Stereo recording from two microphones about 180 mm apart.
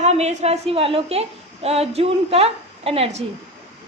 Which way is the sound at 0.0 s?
40° right (ahead or behind).